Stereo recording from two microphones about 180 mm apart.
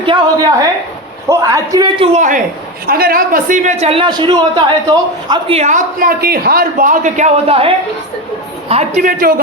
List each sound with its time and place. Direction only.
0.0 s speech: 25° right (ahead or behind)
2.1 s a man's voice: 45° right (ahead or behind)
2.8 s a man's voice: 55° right (ahead or behind); by 7.7 s 35° right (ahead or behind)
8.7 s speech: 35° right (ahead or behind)